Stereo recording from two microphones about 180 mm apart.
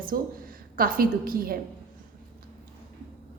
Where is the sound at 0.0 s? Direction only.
50° right (ahead or behind).